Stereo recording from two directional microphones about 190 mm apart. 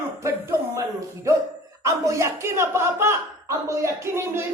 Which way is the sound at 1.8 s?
15° right (ahead or behind).